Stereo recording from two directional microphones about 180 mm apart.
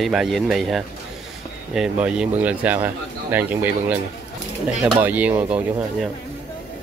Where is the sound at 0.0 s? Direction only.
Centre (ahead or behind).